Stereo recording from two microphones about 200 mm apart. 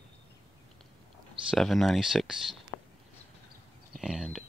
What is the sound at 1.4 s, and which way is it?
Speech, centre (ahead or behind).